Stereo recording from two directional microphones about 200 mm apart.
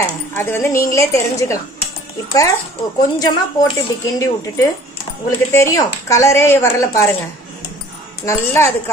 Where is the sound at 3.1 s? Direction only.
15° left (ahead or behind).